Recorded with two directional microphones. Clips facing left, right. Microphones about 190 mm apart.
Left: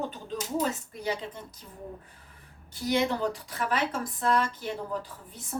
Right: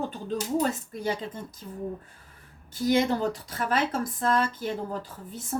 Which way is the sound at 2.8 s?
45° right (ahead or behind).